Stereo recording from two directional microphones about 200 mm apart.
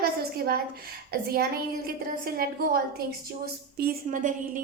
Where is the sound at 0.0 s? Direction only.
50° right (ahead or behind).